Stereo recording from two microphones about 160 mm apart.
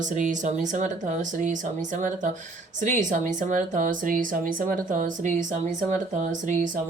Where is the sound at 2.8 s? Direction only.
50° right (ahead or behind).